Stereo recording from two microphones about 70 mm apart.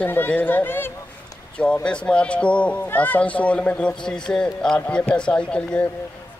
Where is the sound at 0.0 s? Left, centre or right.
Left.